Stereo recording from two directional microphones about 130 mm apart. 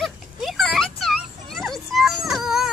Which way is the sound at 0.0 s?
Centre (ahead or behind).